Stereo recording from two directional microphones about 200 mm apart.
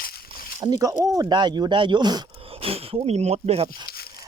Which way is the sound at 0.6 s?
20° right (ahead or behind).